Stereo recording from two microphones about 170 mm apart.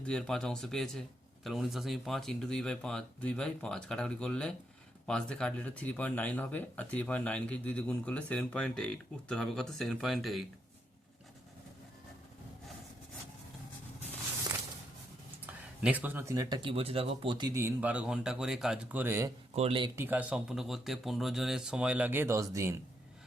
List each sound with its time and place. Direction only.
0.0 s speech: 5° left (ahead or behind)
15.8 s speech: 10° right (ahead or behind)
16.6 s speech: 35° right (ahead or behind)
17.6 s speech: 10° right (ahead or behind)
19.5 s speech: 35° right (ahead or behind)
20.0 s speech: 10° right (ahead or behind)